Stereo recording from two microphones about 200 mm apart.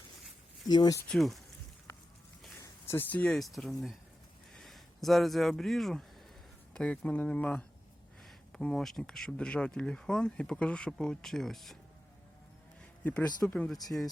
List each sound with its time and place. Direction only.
0.7 s speech: 20° left (ahead or behind)
1.0 s speech: centre (ahead or behind)
2.6 s speech: 10° left (ahead or behind)
12.8 s speech: 5° left (ahead or behind)